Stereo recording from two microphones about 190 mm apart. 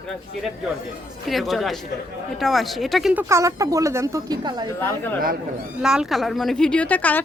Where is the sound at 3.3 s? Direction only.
15° right (ahead or behind).